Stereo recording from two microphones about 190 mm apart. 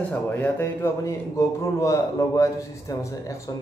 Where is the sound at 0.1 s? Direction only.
10° left (ahead or behind).